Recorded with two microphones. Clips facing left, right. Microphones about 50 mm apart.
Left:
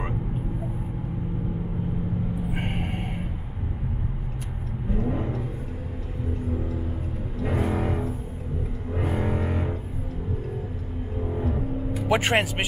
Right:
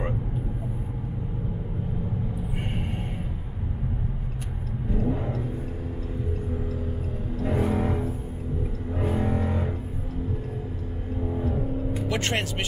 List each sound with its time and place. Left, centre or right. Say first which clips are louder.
2.5 s a sound: left 2 dB; left
4.9 s vehicle: even; centre
7.3 s vehicle: right 1 dB; centre
9.0 s a sound: right 1 dB; centre
11.2 s vehicle: even; centre
12.1 s speech: left 8 dB; centre